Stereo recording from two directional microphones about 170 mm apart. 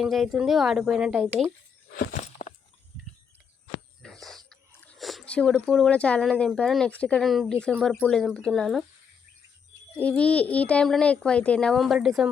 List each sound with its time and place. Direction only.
0.0 s speech: centre (ahead or behind)
1.9 s a sound: 55° left (ahead or behind)
4.0 s speech: 5° left (ahead or behind)
10.0 s a child's voice: 5° left (ahead or behind)